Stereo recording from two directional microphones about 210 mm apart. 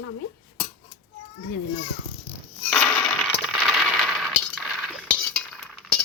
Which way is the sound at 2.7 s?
10° left (ahead or behind).